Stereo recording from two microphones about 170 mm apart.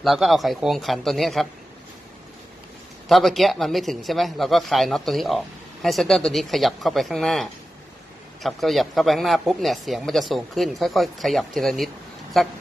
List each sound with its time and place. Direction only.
0.0 s speech: centre (ahead or behind)
3.1 s speech: centre (ahead or behind)